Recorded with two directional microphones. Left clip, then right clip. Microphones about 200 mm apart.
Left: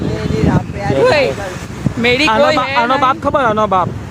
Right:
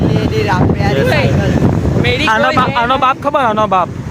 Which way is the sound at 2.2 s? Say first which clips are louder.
Right 3 dB; centre (ahead or behind).